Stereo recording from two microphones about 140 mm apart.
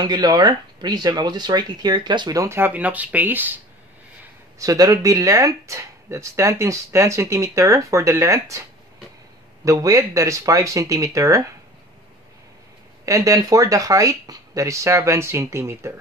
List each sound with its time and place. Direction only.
0.0 s speech: 30° right (ahead or behind); by 3.5 s 15° right (ahead or behind)
4.6 s speech: 25° right (ahead or behind)
9.7 s speech: 25° right (ahead or behind)
13.0 s speech: 25° right (ahead or behind)